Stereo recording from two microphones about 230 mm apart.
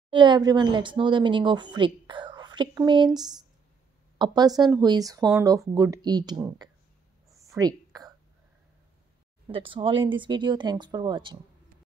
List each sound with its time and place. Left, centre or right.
0.1 s a woman's voice: centre
7.4 s a sound: centre
9.5 s speech: right